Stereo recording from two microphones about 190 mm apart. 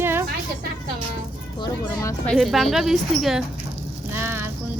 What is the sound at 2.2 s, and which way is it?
Speech, centre (ahead or behind).